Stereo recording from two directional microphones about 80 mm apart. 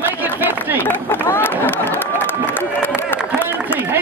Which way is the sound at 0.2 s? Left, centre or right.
Right.